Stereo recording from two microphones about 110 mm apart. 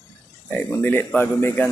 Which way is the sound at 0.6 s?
20° left (ahead or behind).